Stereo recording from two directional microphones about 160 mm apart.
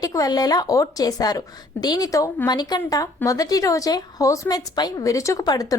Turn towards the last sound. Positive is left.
turn(degrees=20)  # may be behind; listen again after turning